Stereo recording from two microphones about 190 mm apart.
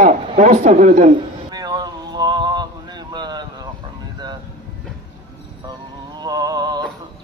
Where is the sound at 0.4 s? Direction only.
40° right (ahead or behind).